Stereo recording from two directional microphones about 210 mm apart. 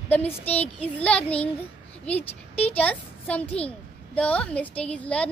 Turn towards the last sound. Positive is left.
turn(degrees=5)  # may be behind; listen again after turning